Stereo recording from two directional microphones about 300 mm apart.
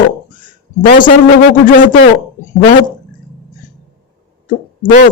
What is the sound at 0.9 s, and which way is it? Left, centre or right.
Speech, left.